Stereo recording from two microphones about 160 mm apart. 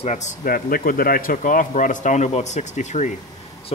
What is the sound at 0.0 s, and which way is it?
A man's voice, 45° left (ahead or behind).